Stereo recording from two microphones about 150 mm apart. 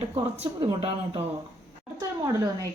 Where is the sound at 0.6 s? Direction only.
35° right (ahead or behind).